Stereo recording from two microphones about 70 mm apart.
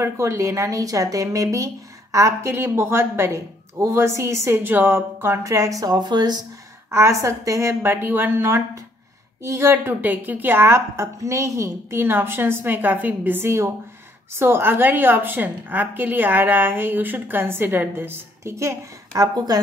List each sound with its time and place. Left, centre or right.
0.0 s speech: right
2.5 s a woman's voice: right
4.6 s speech: right
6.9 s a woman's voice: right